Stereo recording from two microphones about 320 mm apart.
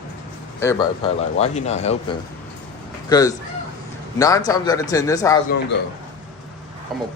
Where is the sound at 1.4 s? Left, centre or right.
Left.